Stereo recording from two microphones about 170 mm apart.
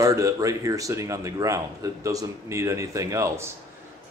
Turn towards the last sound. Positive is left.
turn(degrees=-15)  # may be behind; listen again after turning